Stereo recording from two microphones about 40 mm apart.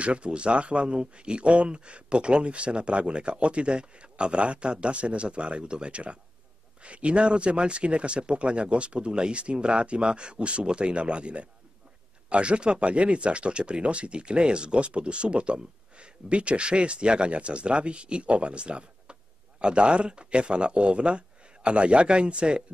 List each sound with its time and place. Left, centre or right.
0.0 s speech: right